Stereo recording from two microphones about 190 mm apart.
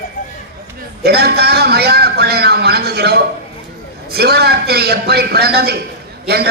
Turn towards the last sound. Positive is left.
turn(degrees=-55)  # may be behind; listen again after turning